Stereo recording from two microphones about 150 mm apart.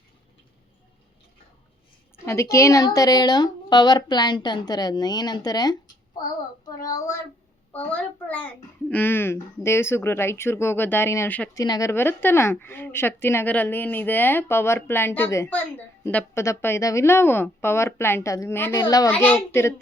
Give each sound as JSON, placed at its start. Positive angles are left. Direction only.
{"t": 2.2, "sound": "a woman's voice", "side_deg": 20}
{"t": 6.8, "sound": "a woman's voice", "side_deg": 25}
{"t": 8.9, "sound": "a woman's voice", "side_deg": 15}
{"t": 19.1, "sound": "a woman's voice", "side_deg": 10}